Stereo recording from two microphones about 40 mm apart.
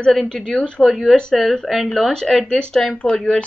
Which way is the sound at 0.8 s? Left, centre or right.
Centre.